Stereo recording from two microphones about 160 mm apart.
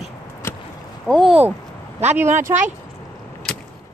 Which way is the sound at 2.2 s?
50° right (ahead or behind).